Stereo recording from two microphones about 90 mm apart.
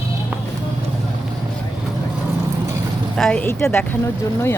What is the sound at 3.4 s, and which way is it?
Speech, 25° left (ahead or behind).